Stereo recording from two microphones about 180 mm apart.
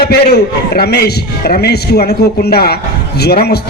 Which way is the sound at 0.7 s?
60° left (ahead or behind).